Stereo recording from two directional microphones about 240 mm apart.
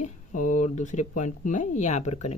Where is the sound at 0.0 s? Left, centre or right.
Left.